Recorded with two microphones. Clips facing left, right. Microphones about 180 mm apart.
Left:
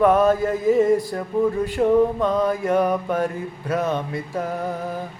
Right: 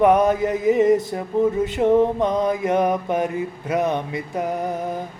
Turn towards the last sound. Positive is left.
turn(degrees=-20)  # may be behind; listen again after turning